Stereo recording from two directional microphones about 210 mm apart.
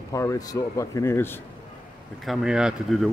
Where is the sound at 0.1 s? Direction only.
15° left (ahead or behind).